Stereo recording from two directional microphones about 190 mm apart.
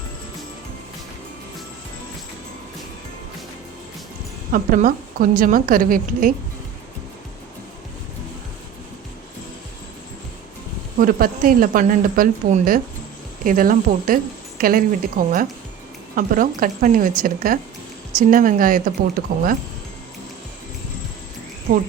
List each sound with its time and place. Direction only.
4.5 s speech: 45° right (ahead or behind)
10.9 s speech: 50° right (ahead or behind)
21.7 s speech: 45° right (ahead or behind)